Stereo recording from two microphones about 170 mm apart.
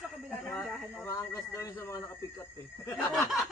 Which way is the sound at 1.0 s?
15° left (ahead or behind).